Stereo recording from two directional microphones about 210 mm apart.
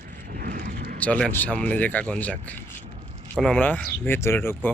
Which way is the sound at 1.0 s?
5° left (ahead or behind).